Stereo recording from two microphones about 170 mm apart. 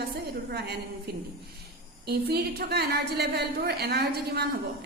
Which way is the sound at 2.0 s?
70° right (ahead or behind).